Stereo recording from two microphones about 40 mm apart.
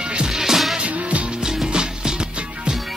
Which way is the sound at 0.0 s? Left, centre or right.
Right.